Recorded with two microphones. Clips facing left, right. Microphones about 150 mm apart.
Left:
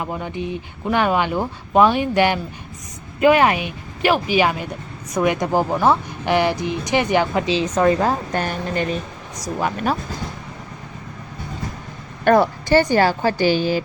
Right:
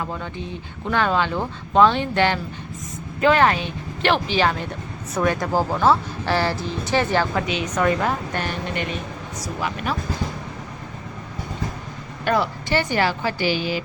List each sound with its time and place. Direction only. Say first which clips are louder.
0.0 s speech: left 4 dB; 15° left (ahead or behind)
7.4 s a woman's voice: left 4 dB; 30° left (ahead or behind)
8.4 s speech: left 4 dB; 45° left (ahead or behind)
12.2 s speech: left 7 dB; 50° left (ahead or behind)